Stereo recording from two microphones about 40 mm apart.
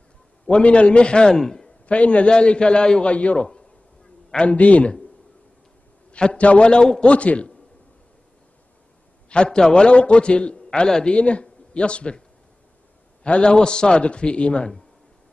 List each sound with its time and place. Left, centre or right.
0.5 s a man's voice: left
1.4 s a man's voice: centre
1.9 s a man's voice: left
4.5 s a man's voice: left
6.1 s a man's voice: left
9.3 s a man's voice: left
13.2 s a man's voice: left